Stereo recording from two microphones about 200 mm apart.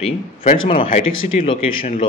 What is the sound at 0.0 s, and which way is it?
Speech, 30° left (ahead or behind).